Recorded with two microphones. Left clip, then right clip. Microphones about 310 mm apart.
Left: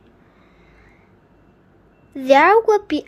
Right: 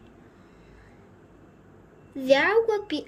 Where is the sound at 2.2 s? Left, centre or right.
Centre.